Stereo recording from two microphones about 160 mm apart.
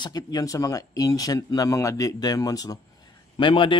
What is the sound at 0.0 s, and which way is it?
A man's voice, 25° left (ahead or behind).